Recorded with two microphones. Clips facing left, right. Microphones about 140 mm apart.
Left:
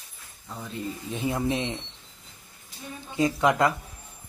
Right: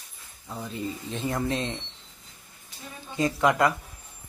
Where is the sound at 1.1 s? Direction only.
15° left (ahead or behind).